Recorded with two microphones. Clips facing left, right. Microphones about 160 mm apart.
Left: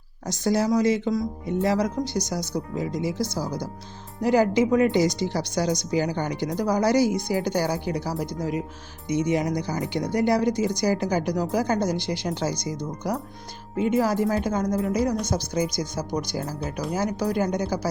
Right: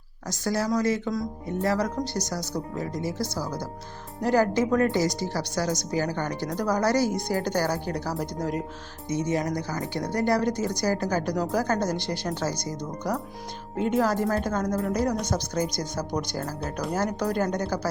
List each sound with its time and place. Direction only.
0.3 s a woman's voice: 20° left (ahead or behind); by 8.6 s 5° left (ahead or behind)
9.0 s a woman's voice: 15° left (ahead or behind)